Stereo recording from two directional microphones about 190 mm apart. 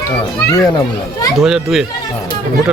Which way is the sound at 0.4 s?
20° left (ahead or behind).